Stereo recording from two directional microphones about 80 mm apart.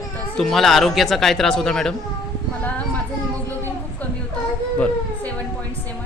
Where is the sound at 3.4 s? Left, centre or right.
Left.